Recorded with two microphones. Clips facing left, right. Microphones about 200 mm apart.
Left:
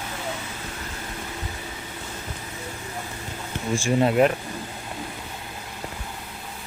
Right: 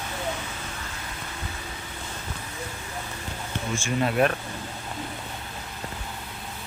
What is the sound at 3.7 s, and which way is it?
Speech, 30° left (ahead or behind).